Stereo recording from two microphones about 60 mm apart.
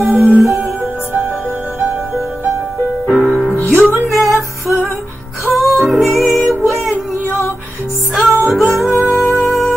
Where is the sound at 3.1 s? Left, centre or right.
Centre.